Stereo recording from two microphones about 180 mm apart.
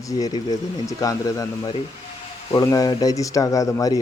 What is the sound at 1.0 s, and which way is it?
Speech, 20° left (ahead or behind).